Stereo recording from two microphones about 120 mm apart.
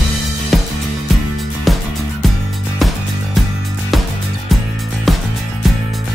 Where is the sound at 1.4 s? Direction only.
Centre (ahead or behind).